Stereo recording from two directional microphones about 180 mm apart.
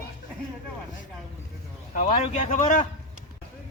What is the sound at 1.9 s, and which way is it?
Speech, 45° left (ahead or behind).